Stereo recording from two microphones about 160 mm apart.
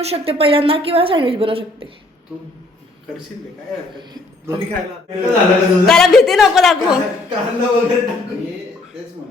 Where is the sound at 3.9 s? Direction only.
25° right (ahead or behind).